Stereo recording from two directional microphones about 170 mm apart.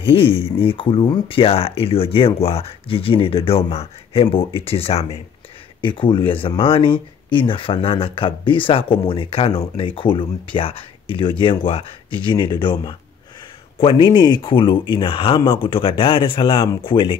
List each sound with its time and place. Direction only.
0.0 s speech: 35° left (ahead or behind)